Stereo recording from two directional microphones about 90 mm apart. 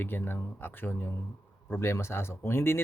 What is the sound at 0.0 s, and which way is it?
Speech, 25° left (ahead or behind).